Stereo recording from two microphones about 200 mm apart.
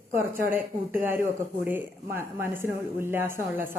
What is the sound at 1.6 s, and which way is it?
Speech, 10° right (ahead or behind).